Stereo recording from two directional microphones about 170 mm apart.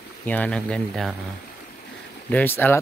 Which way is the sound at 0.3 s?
5° left (ahead or behind).